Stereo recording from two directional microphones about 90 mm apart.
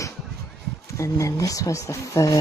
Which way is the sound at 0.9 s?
35° left (ahead or behind).